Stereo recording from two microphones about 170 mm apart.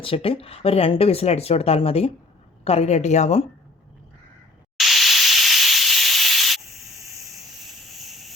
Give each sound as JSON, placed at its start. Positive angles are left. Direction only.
{"t": 0.0, "sound": "speech", "side_deg": 35}
{"t": 4.8, "sound": "steam", "side_deg": 0}
{"t": 7.7, "sound": "vehicle", "side_deg": 0}